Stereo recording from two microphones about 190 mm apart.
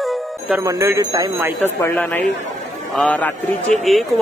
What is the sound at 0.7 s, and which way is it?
Speech, 15° right (ahead or behind).